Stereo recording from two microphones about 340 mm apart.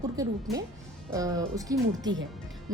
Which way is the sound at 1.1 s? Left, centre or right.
Centre.